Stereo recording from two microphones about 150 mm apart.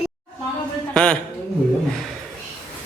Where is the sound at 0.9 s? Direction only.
5° left (ahead or behind).